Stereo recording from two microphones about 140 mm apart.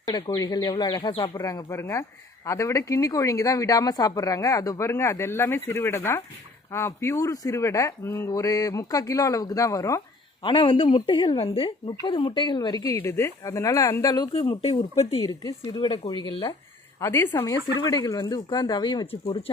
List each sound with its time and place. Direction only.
0.0 s speech: 25° left (ahead or behind)
10.4 s a woman's voice: 35° left (ahead or behind)
14.6 s speech: 45° left (ahead or behind)
15.2 s speech: 25° left (ahead or behind)
15.6 s a woman's voice: 35° left (ahead or behind)
17.0 s a woman's voice: 20° left (ahead or behind)